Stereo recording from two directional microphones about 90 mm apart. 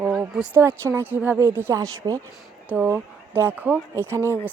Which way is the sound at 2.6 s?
20° right (ahead or behind).